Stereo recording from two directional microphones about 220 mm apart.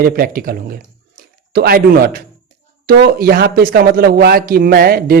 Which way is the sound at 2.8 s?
45° right (ahead or behind).